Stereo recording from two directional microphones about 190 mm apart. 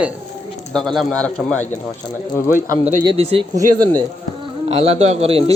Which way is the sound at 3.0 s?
30° right (ahead or behind).